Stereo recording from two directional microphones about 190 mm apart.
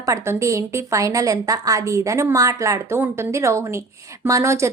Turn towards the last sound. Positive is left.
turn(degrees=-15)  # may be behind; listen again after turning